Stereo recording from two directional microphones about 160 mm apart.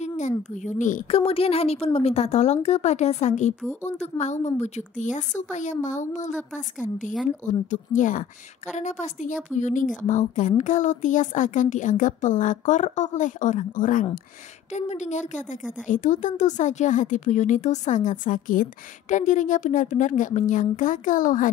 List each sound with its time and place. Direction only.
0.0 s a child's voice: 50° left (ahead or behind)
1.0 s a woman's voice: 35° left (ahead or behind); by 21.5 s 55° left (ahead or behind)